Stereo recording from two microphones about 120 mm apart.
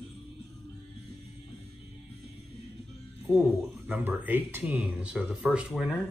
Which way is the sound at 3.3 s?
15° right (ahead or behind).